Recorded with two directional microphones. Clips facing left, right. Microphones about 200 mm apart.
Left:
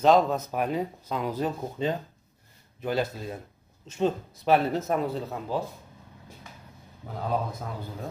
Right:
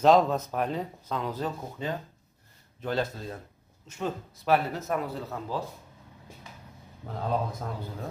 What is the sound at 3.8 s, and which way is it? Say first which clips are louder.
Speech: left 7 dB; 25° left (ahead or behind).